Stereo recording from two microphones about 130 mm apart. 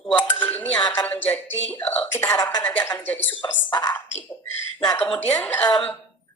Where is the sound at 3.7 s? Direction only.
30° left (ahead or behind).